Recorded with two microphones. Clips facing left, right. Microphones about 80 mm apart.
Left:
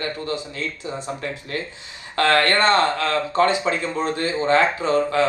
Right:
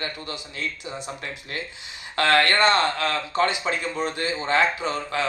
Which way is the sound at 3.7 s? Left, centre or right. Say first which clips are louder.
Left 3 dB; left.